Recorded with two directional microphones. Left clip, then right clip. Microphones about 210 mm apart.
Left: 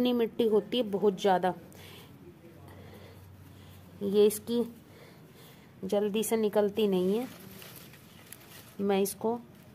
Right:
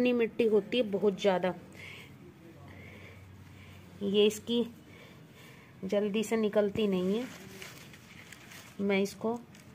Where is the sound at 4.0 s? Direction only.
15° left (ahead or behind).